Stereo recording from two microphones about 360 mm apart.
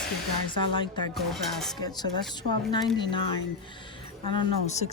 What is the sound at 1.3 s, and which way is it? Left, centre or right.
Speech, centre.